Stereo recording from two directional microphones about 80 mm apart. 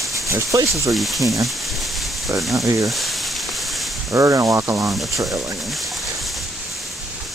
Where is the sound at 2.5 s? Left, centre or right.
Right.